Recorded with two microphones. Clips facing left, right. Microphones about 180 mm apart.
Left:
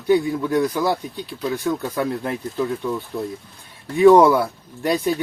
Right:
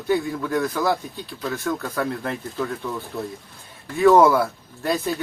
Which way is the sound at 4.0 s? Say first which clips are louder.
Left 3 dB; 15° left (ahead or behind).